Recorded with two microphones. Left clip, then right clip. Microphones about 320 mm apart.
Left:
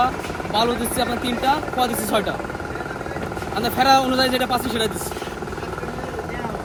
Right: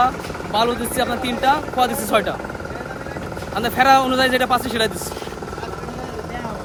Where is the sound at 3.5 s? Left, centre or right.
Centre.